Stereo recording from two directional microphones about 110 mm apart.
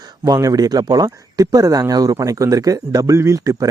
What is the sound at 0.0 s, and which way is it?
Speech, 35° right (ahead or behind).